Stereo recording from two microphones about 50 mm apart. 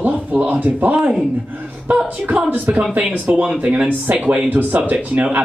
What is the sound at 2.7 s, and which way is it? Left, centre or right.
Speech, right.